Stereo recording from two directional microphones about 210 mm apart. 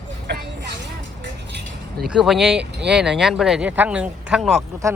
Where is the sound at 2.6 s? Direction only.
55° right (ahead or behind).